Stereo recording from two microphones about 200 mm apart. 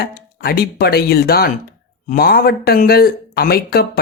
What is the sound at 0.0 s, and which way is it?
Speech, 50° left (ahead or behind).